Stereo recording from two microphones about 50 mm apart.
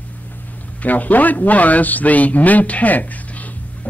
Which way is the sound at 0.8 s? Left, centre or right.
Left.